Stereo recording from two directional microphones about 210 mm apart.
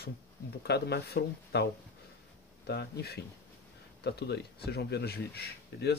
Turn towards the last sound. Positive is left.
turn(degrees=50)  # may be behind; listen again after turning